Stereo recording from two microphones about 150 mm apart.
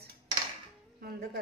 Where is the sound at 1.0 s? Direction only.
90° right.